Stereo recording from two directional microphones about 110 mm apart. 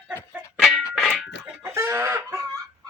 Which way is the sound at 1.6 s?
25° right (ahead or behind).